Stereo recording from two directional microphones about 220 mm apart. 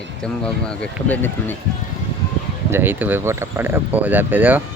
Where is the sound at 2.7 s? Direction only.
10° right (ahead or behind).